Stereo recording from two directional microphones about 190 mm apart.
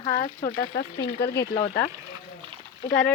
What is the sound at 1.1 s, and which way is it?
Speech, 60° left (ahead or behind).